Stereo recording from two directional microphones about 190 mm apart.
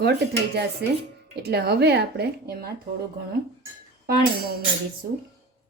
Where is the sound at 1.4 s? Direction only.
60° right (ahead or behind).